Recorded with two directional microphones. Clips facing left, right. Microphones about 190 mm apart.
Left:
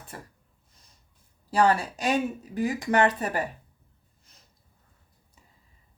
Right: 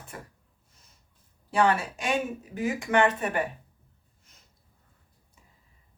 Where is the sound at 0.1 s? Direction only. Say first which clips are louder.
Even; 35° left (ahead or behind).